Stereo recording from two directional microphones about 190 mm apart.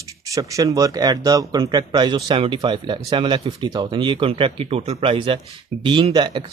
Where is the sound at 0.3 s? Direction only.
15° right (ahead or behind).